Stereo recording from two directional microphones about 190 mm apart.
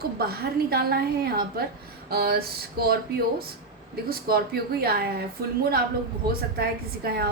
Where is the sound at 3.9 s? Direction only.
55° right (ahead or behind).